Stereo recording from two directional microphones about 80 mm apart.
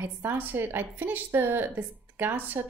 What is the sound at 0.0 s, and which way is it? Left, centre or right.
A woman's voice, right.